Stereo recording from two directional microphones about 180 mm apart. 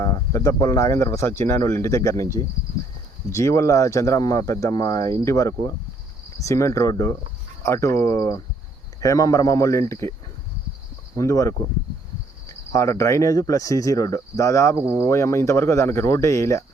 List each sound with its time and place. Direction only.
0.0 s speech: 15° left (ahead or behind)
3.2 s speech: 15° left (ahead or behind)
11.2 s speech: 15° left (ahead or behind)